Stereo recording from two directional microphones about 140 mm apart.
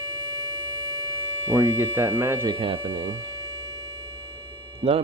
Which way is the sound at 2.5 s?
40° right (ahead or behind).